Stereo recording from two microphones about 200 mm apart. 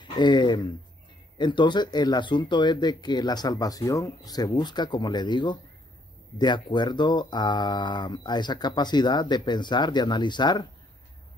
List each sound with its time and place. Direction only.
0.0 s speech: 20° left (ahead or behind)